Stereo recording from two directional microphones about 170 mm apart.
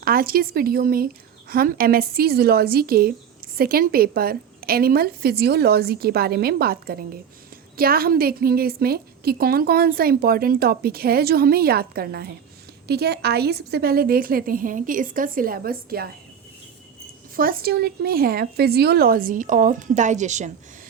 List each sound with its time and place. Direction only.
0.0 s a woman's voice: 60° right (ahead or behind)
17.3 s a woman's voice: 60° right (ahead or behind)